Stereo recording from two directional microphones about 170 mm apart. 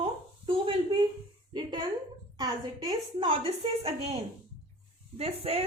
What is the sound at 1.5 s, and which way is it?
A woman's voice, 25° right (ahead or behind).